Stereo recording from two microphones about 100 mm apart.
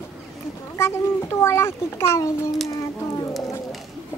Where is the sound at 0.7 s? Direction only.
25° left (ahead or behind).